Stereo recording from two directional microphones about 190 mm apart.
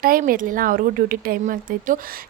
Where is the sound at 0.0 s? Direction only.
50° right (ahead or behind).